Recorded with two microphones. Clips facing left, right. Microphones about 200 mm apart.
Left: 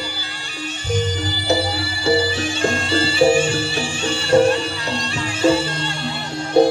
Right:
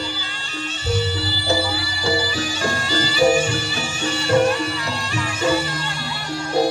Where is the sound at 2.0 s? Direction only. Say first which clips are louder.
Left 4 dB; 25° left (ahead or behind).